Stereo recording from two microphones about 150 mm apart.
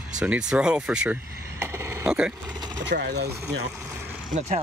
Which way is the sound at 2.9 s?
90° right.